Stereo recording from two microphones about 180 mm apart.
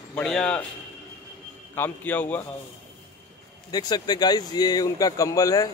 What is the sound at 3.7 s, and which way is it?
Speech, 20° left (ahead or behind).